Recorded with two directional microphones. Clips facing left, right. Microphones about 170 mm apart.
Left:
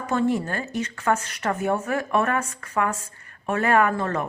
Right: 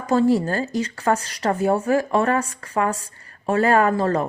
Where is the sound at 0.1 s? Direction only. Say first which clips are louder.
Right 5 dB; 35° right (ahead or behind).